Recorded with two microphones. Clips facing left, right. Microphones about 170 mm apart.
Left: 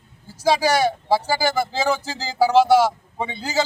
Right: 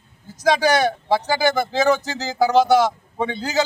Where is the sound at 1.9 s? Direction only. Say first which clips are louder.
Right 3 dB; 30° left (ahead or behind).